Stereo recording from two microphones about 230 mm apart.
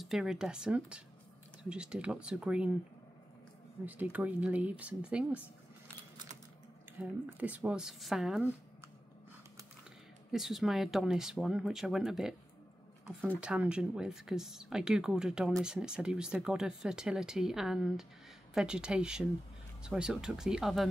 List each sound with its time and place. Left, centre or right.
0.0 s speech: centre
3.8 s speech: centre
7.0 s speech: centre
10.3 s speech: centre
13.4 s speech: centre